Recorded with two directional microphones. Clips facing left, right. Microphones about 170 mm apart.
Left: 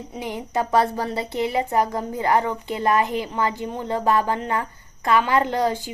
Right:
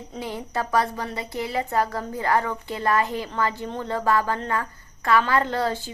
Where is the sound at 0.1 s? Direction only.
15° left (ahead or behind).